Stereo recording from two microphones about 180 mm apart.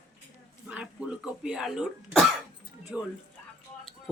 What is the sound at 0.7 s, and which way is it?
Speech, 5° right (ahead or behind).